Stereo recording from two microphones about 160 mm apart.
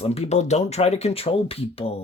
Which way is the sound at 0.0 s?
40° left (ahead or behind).